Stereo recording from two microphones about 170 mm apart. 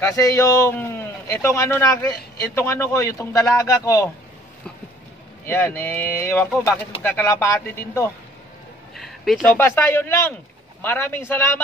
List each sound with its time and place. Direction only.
0.0 s a man's voice: 20° left (ahead or behind)
5.5 s a man's voice: 15° left (ahead or behind)
8.9 s a man's voice: centre (ahead or behind)